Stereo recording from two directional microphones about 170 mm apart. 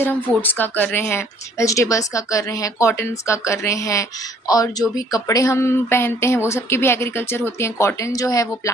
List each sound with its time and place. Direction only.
0.0 s speech: 10° left (ahead or behind)